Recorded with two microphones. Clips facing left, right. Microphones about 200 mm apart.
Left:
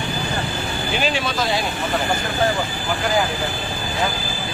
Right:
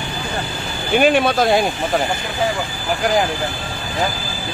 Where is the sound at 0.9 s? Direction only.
55° right (ahead or behind).